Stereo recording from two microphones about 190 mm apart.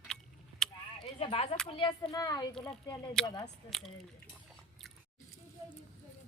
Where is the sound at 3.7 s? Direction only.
Centre (ahead or behind).